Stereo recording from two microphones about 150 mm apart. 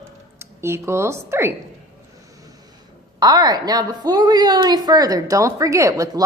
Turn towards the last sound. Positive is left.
turn(degrees=-20)  # may be behind; listen again after turning